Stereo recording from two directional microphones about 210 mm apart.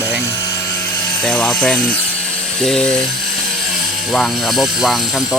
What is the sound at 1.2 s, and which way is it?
Speech, 5° left (ahead or behind).